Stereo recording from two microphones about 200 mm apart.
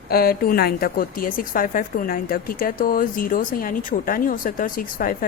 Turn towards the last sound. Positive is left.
turn(degrees=45)  # may be behind; listen again after turning